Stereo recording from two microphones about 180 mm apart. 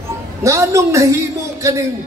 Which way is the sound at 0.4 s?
15° right (ahead or behind).